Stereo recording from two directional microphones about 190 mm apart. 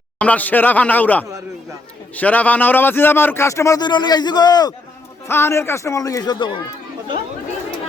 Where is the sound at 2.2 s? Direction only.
10° left (ahead or behind).